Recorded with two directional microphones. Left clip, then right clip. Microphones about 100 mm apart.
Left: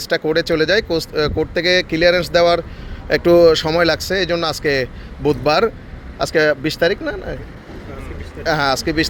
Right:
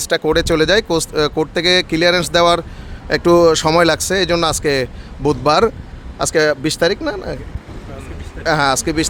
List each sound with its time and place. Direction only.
0.0 s speech: 75° right (ahead or behind)
3.1 s speech: 45° right (ahead or behind)
3.7 s speech: 60° right (ahead or behind)
5.2 s speech: 40° right (ahead or behind)
8.4 s speech: 50° right (ahead or behind)